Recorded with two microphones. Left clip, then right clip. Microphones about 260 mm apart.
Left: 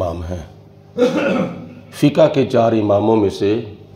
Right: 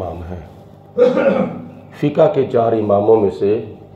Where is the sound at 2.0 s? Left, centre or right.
Left.